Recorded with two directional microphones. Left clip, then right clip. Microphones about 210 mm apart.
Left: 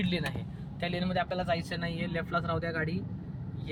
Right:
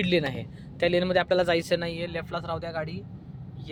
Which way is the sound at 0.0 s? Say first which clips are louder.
Right 8 dB; 40° right (ahead or behind).